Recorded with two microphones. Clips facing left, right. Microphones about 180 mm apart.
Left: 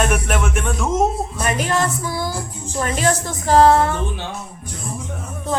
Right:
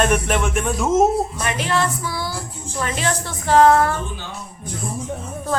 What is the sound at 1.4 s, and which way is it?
A woman's voice, 45° left (ahead or behind).